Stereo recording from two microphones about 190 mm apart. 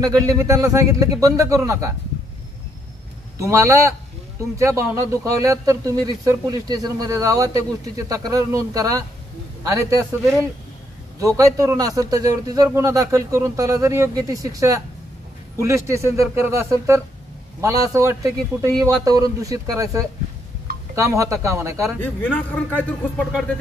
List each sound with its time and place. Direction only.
0.0 s a man's voice: 20° right (ahead or behind)
3.3 s a man's voice: 15° right (ahead or behind)
11.1 s a man's voice: 15° right (ahead or behind)
22.0 s speech: 10° left (ahead or behind)